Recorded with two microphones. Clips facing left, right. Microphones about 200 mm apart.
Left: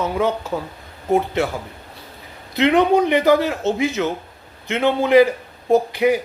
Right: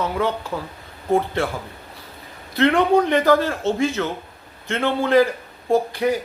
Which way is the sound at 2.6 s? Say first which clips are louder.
Left 1 dB; 15° left (ahead or behind).